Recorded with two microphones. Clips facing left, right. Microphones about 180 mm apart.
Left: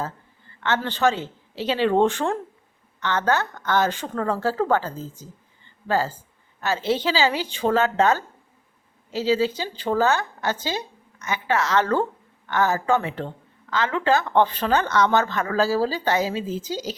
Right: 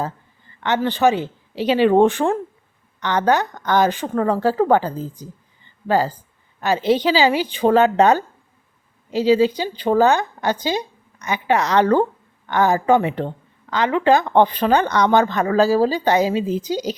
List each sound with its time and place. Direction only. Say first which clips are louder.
0.0 s a woman's voice: right 4 dB; 15° right (ahead or behind)